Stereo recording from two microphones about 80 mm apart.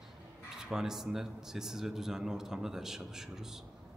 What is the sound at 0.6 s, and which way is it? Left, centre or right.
Speech, centre.